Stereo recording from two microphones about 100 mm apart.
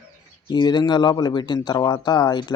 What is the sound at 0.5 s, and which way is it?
Speech, 50° left (ahead or behind).